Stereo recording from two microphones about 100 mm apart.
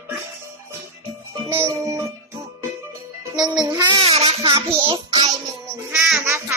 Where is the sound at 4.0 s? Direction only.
90° right.